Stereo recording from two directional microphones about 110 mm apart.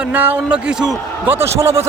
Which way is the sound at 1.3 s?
20° right (ahead or behind).